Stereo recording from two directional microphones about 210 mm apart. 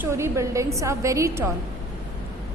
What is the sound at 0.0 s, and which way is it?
A woman's voice, 15° right (ahead or behind).